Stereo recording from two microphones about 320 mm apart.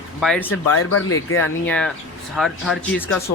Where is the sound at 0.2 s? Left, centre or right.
Centre.